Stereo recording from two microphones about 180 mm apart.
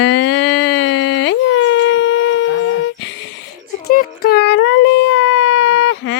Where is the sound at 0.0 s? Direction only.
85° left.